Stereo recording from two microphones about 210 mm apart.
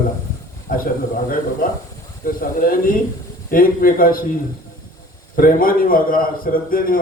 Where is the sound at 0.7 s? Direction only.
40° left (ahead or behind).